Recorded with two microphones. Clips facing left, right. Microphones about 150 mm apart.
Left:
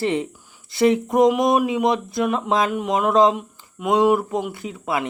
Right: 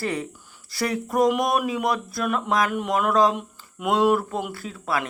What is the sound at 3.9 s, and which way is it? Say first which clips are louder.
Speech: left 3 dB; 15° left (ahead or behind).